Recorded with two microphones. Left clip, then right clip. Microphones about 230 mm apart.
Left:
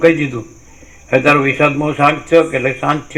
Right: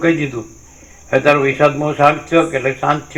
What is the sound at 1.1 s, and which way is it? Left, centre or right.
Speech, left.